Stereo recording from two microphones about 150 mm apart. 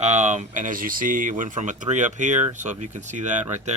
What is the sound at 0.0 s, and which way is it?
Speech, 50° right (ahead or behind).